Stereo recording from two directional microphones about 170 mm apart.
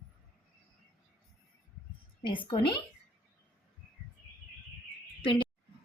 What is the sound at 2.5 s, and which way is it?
Speech, 30° left (ahead or behind).